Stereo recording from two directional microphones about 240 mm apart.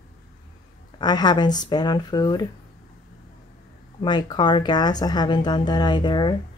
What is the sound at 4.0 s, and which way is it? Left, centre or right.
A woman's voice, centre.